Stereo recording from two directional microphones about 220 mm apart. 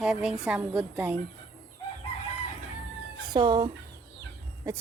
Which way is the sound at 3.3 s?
20° right (ahead or behind).